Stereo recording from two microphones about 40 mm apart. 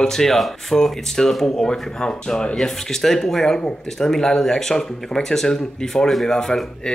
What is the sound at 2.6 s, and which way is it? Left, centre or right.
Speech, centre.